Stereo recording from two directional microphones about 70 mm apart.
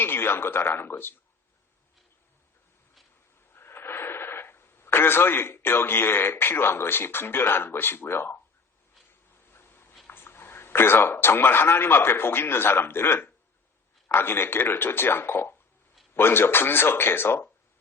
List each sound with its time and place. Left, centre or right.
0.0 s speech: left
3.5 s speech: left
10.1 s a man's voice: left